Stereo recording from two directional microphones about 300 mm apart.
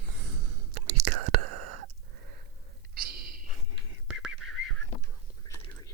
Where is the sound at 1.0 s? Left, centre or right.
Right.